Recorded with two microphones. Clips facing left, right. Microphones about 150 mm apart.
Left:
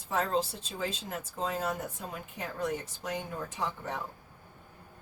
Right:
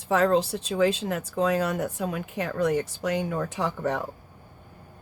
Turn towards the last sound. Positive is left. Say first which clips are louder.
# right 8 dB
turn(degrees=-80)